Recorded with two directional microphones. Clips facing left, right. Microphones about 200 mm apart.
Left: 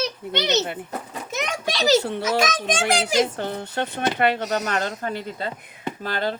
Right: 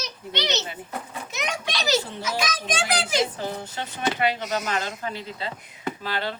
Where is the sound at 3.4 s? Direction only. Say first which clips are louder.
Left 4 dB; 60° left (ahead or behind).